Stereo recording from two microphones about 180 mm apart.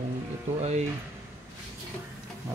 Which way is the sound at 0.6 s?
40° right (ahead or behind).